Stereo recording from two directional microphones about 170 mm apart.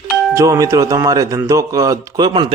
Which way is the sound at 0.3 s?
20° right (ahead or behind).